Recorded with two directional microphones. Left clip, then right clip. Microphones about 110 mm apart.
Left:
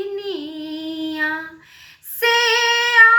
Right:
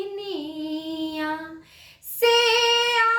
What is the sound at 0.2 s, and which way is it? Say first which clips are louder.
Singing: left 3 dB; 45° right (ahead or behind).